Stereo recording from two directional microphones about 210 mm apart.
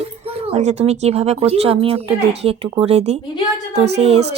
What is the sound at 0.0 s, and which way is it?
Speech, 30° right (ahead or behind).